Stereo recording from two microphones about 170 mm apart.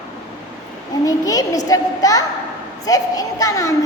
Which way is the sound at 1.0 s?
20° left (ahead or behind).